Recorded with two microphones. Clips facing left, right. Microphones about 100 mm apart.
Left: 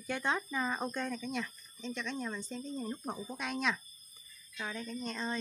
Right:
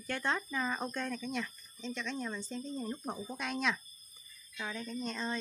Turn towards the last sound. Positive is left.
turn(degrees=0)  # may be behind; listen again after turning